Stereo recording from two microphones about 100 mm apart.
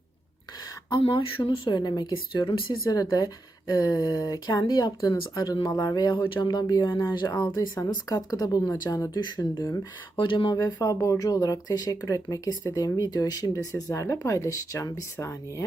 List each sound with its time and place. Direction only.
0.9 s speech: 60° left (ahead or behind); by 2.1 s 45° left (ahead or behind)
2.1 s speech: 55° left (ahead or behind)
6.5 s speech: 40° left (ahead or behind)
9.1 s speech: 50° left (ahead or behind)
9.4 s speech: 35° left (ahead or behind)
10.2 s speech: 55° left (ahead or behind)
10.5 s speech: 40° left (ahead or behind)